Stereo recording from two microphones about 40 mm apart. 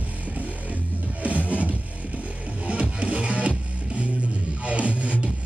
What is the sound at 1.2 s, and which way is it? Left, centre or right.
Music, right.